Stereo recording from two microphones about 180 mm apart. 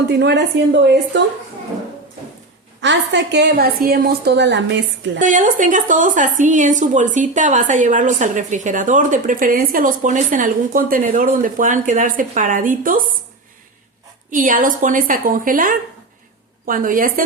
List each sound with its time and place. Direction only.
0.1 s a woman's voice: 70° right (ahead or behind)
2.8 s a woman's voice: 85° right
5.2 s a woman's voice: 45° right (ahead or behind)
14.3 s a woman's voice: 45° right (ahead or behind)